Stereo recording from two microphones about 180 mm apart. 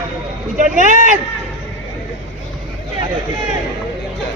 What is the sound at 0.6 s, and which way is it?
Speech, 45° right (ahead or behind).